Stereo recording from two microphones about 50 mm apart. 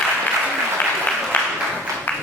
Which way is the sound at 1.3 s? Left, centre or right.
Left.